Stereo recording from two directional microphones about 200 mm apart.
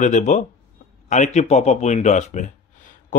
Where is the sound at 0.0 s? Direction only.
40° left (ahead or behind).